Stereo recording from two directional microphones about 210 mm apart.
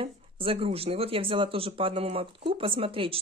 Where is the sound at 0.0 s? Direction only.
25° right (ahead or behind).